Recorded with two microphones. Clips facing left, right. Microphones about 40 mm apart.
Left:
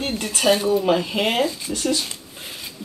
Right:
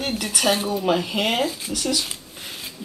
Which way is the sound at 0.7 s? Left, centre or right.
Centre.